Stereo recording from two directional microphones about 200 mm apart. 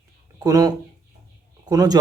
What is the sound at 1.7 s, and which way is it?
Speech, 15° right (ahead or behind).